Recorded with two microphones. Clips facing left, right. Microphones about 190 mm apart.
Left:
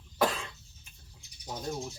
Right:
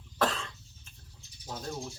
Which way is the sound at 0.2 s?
10° left (ahead or behind).